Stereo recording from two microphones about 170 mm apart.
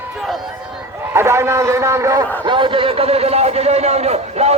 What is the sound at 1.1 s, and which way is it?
A man's voice, 15° right (ahead or behind).